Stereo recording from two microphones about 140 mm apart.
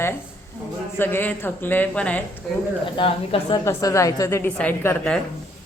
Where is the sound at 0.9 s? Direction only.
15° left (ahead or behind).